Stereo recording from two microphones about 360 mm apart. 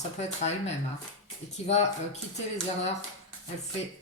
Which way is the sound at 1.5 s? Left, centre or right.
Centre.